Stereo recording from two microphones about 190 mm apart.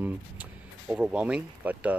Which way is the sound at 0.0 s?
10° right (ahead or behind).